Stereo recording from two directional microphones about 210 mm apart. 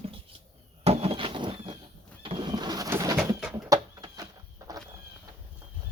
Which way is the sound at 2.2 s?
25° right (ahead or behind).